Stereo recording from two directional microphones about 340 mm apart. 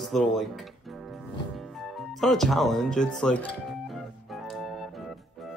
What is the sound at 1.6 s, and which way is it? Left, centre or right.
Speech, centre.